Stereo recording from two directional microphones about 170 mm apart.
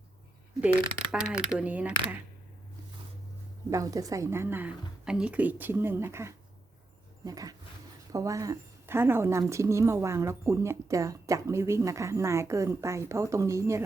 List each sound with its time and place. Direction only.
1.1 s speech: 5° right (ahead or behind)
3.7 s a woman's voice: 20° right (ahead or behind)